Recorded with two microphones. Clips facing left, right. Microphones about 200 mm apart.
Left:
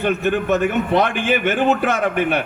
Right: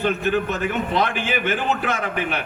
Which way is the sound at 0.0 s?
60° left (ahead or behind).